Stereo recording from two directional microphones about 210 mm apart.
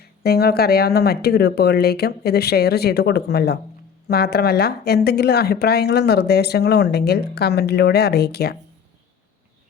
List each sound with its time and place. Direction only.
0.0 s speech: 50° left (ahead or behind)